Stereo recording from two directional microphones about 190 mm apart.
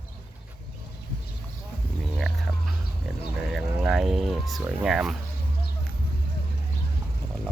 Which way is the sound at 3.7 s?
Centre (ahead or behind).